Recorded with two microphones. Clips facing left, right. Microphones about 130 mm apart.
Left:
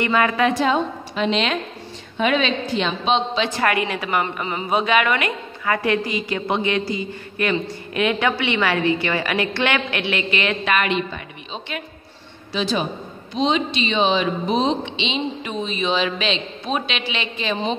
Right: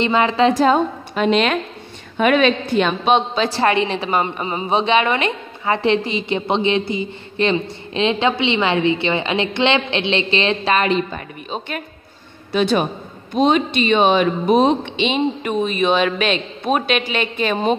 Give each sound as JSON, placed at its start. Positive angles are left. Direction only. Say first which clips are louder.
{"t": 0.0, "sound": "a woman's voice", "louder": "right 3 dB", "side_deg": -25}
{"t": 0.6, "sound": "a woman's voice", "louder": "right 4 dB", "side_deg": -45}
{"t": 3.4, "sound": "a woman's voice", "louder": "right 4 dB", "side_deg": -30}